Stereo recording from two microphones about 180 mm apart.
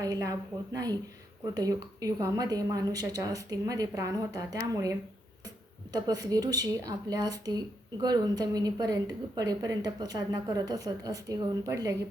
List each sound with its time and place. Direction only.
0.0 s a woman's voice: 20° right (ahead or behind)